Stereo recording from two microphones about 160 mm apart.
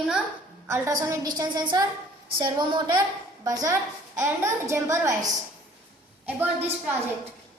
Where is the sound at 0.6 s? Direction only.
15° right (ahead or behind).